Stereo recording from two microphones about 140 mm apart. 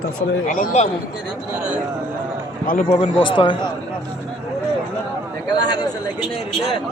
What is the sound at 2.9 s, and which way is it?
Speech, 40° left (ahead or behind).